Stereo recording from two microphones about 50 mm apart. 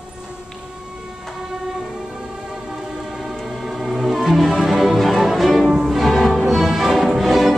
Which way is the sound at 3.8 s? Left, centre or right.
Centre.